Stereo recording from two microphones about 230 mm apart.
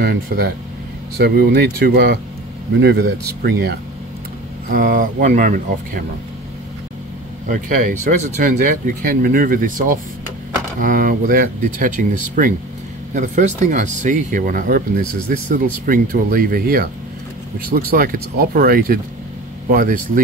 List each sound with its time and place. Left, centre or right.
0.0 s speech: right
7.4 s speech: right